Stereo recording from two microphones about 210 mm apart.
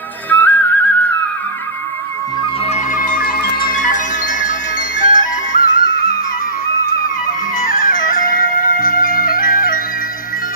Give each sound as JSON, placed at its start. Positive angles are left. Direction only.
{"t": 0.3, "sound": "music", "side_deg": 10}
{"t": 2.6, "sound": "music", "side_deg": 35}
{"t": 7.5, "sound": "music", "side_deg": 40}